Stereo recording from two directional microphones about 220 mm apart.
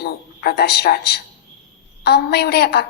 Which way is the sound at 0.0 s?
45° left (ahead or behind).